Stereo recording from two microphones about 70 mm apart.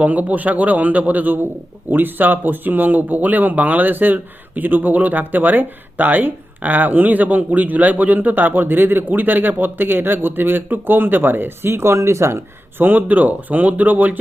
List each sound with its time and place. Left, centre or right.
0.0 s speech: right
12.8 s speech: right